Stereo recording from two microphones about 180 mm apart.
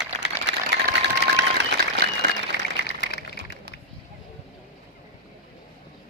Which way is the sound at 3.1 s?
65° left (ahead or behind).